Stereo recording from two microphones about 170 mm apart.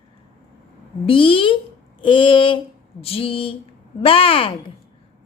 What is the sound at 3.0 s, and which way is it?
A woman's voice, 35° left (ahead or behind).